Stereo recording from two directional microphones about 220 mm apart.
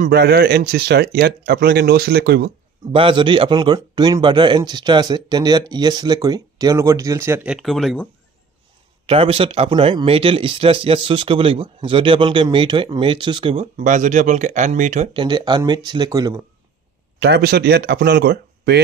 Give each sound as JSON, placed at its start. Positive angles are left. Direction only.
{"t": 0.0, "sound": "speech", "side_deg": -45}
{"t": 2.9, "sound": "speech", "side_deg": -25}
{"t": 9.0, "sound": "speech", "side_deg": -25}
{"t": 15.1, "sound": "speech", "side_deg": -20}
{"t": 17.2, "sound": "speech", "side_deg": -50}